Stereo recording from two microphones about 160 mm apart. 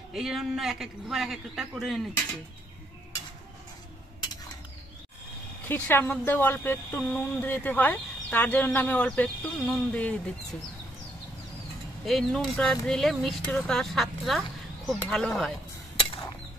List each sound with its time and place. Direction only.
0.1 s speech: centre (ahead or behind)
5.7 s speech: 15° left (ahead or behind)
12.0 s speech: 5° left (ahead or behind)